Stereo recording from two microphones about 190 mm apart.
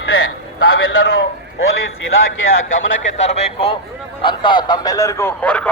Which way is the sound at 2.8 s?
90° left.